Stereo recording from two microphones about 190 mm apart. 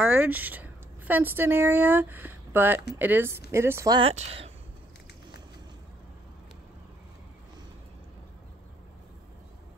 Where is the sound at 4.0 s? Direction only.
30° right (ahead or behind).